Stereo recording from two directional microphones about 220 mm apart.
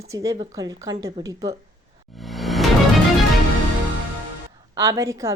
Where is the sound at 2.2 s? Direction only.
Centre (ahead or behind).